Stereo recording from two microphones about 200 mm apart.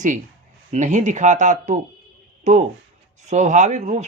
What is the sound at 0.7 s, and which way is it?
Speech, 40° right (ahead or behind).